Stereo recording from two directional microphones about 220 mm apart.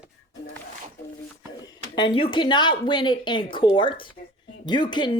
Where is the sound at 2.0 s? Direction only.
25° left (ahead or behind).